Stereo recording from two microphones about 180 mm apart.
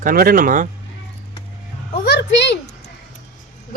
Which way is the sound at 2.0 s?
70° left (ahead or behind).